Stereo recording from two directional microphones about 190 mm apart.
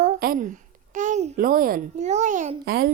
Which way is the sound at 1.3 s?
50° right (ahead or behind).